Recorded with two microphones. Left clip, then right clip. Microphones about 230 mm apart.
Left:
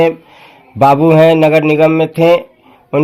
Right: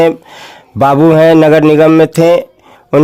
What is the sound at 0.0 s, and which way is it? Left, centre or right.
Speech, right.